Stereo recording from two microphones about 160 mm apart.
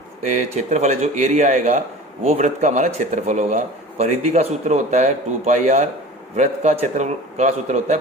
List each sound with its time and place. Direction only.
0.3 s speech: 45° right (ahead or behind)